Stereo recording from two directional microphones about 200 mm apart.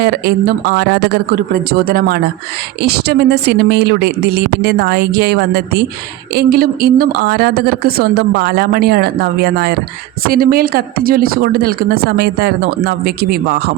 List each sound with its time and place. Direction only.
0.0 s a woman's voice: 55° right (ahead or behind)